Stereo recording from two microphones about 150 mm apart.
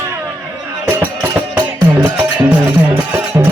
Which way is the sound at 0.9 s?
10° right (ahead or behind).